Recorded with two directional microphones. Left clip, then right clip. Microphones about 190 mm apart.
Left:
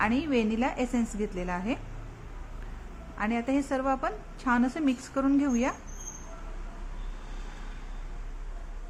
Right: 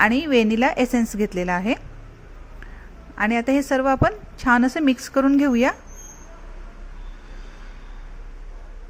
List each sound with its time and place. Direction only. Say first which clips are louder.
0.0 s a woman's voice: right 10 dB; 30° right (ahead or behind)
3.2 s a woman's voice: right 9 dB; 30° right (ahead or behind)